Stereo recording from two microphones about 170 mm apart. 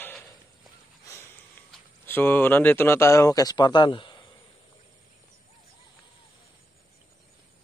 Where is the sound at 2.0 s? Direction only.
10° left (ahead or behind); by 4.3 s 30° left (ahead or behind).